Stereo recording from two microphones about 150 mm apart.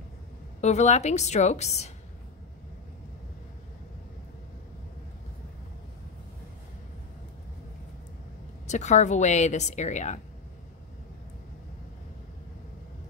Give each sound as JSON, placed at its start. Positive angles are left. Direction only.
{"t": 0.6, "sound": "a woman's voice", "side_deg": 50}
{"t": 8.6, "sound": "a woman's voice", "side_deg": 50}